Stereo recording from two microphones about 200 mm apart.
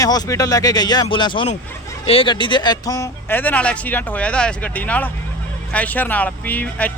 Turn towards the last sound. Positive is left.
turn(degrees=5)  # may be behind; listen again after turning